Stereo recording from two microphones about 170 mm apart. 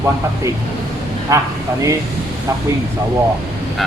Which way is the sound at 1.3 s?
20° right (ahead or behind).